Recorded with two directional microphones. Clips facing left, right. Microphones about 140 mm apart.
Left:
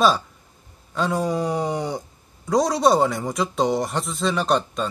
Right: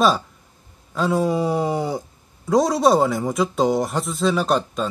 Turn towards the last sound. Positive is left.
turn(degrees=0)  # may be behind; listen again after turning